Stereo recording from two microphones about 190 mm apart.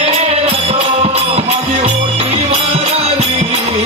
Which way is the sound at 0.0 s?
30° right (ahead or behind).